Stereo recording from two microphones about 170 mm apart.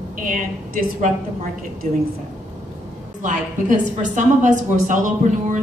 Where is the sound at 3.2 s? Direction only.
50° right (ahead or behind).